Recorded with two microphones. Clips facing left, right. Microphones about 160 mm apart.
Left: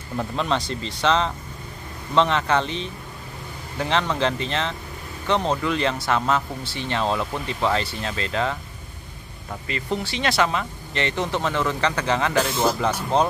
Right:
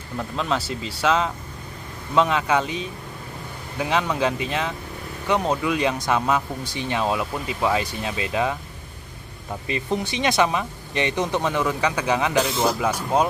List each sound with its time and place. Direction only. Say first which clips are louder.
0.2 s speech: left 1 dB; centre (ahead or behind)
9.7 s speech: right 2 dB; 20° right (ahead or behind)
12.4 s a man's voice: even; centre (ahead or behind)